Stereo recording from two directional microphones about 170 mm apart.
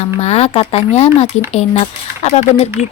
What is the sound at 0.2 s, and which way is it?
Cutlery, 40° left (ahead or behind).